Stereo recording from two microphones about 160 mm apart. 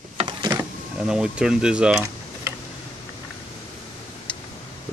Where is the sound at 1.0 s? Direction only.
5° right (ahead or behind).